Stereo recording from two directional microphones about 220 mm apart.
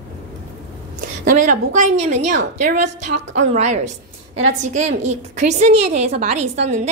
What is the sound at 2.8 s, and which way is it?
Speech, 90° right.